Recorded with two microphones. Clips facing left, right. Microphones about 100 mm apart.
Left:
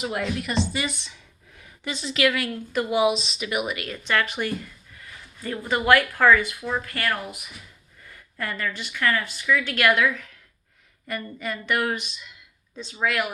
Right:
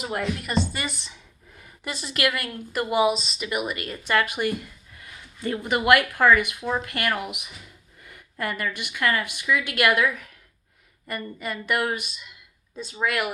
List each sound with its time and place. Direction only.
0.0 s a woman's voice: centre (ahead or behind); by 7.1 s 20° right (ahead or behind)
8.1 s a sound: 15° right (ahead or behind)
8.8 s speech: 15° right (ahead or behind)
13.0 s speech: 5° right (ahead or behind)